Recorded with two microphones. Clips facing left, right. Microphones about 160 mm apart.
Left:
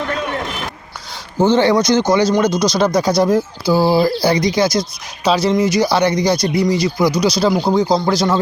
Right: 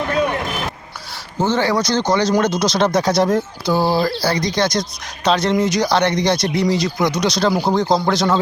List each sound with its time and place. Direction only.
1.4 s speech: 20° left (ahead or behind)
2.6 s speech: centre (ahead or behind)